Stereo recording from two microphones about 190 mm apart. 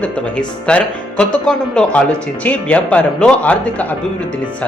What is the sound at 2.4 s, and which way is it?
Speech, 5° left (ahead or behind).